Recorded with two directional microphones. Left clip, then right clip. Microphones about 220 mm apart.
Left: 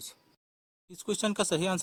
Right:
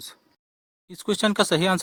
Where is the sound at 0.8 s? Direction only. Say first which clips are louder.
Right 8 dB; 45° right (ahead or behind).